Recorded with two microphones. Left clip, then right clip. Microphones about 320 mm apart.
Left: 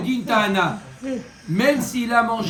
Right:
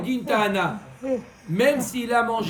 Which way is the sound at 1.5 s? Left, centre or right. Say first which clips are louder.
Left 1 dB; centre.